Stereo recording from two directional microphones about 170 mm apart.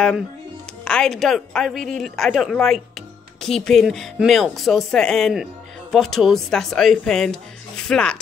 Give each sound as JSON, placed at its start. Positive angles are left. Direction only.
{"t": 0.8, "sound": "speech", "side_deg": 5}